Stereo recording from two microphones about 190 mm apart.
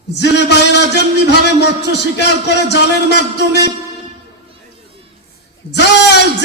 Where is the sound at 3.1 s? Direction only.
60° left (ahead or behind).